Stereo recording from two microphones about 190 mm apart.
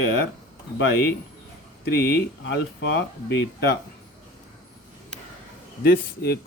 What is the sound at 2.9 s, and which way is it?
Speech, 60° left (ahead or behind).